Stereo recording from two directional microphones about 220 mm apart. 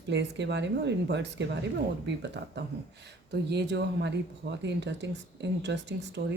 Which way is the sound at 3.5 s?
50° right (ahead or behind).